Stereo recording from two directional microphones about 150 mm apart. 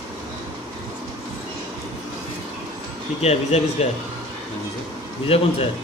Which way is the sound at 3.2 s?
45° left (ahead or behind).